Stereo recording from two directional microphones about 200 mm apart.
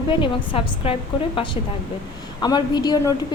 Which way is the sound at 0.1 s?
25° left (ahead or behind).